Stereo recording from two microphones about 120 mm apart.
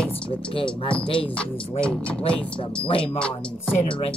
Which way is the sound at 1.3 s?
10° left (ahead or behind).